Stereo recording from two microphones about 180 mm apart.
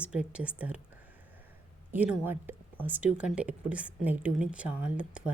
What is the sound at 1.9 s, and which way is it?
A woman's voice, 10° right (ahead or behind).